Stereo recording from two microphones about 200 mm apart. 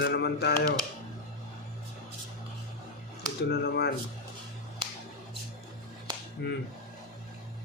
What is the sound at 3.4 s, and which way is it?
Speech, 55° left (ahead or behind).